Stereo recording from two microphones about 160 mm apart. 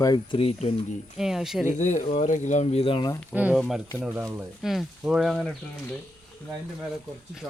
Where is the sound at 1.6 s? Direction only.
50° left (ahead or behind); by 3.1 s 35° left (ahead or behind).